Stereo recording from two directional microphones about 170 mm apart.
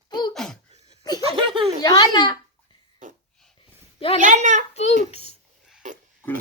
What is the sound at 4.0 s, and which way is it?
Speech, 35° left (ahead or behind).